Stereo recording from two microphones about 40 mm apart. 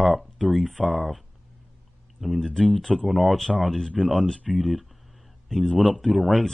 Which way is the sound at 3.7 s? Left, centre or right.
Centre.